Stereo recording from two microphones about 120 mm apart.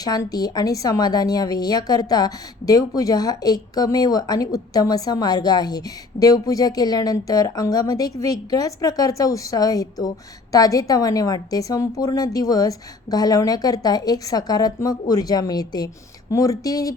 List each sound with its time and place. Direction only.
0.0 s speech: 30° left (ahead or behind)